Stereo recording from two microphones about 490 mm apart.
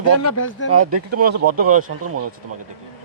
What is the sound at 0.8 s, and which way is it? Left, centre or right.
Speech, right.